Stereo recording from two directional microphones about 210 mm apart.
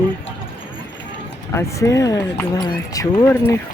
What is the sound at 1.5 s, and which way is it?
Speech, 15° left (ahead or behind).